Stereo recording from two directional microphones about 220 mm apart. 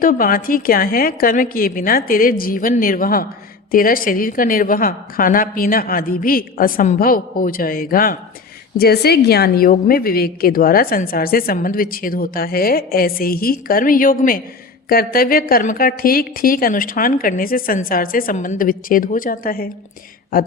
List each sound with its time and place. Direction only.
0.0 s a woman's voice: 40° left (ahead or behind)